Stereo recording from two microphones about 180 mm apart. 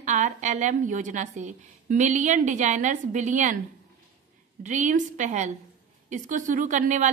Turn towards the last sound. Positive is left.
turn(degrees=-45)  # may be behind; listen again after turning